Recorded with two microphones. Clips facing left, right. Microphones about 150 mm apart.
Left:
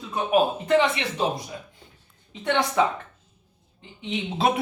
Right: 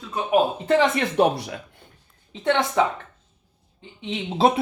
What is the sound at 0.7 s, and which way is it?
Speech, 40° right (ahead or behind).